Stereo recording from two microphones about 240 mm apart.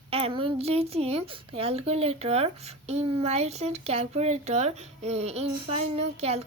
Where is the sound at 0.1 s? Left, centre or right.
Right.